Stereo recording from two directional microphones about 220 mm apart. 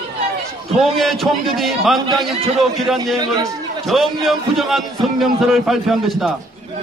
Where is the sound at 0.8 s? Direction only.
Centre (ahead or behind).